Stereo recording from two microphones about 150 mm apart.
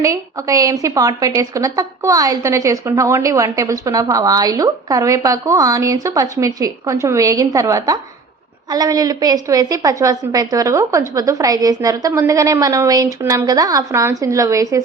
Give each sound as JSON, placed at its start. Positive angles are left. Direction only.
{"t": 0.0, "sound": "a woman's voice", "side_deg": -20}